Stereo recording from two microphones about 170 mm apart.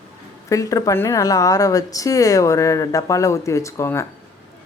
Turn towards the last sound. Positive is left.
turn(degrees=15)  # may be behind; listen again after turning